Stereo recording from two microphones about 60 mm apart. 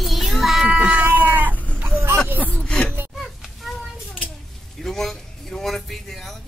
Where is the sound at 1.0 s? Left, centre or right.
Right.